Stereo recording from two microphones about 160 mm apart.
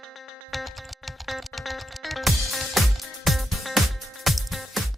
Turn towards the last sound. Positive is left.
turn(degrees=0)  # may be behind; listen again after turning